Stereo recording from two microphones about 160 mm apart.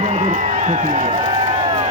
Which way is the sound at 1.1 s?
30° right (ahead or behind).